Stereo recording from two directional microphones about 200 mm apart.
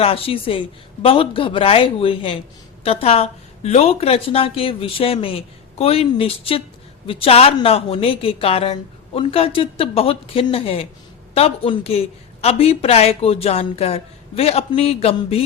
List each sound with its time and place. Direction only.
0.0 s a woman's voice: 30° left (ahead or behind)